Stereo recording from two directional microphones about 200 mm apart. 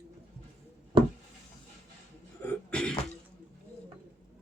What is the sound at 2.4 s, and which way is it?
Cough, 5° left (ahead or behind).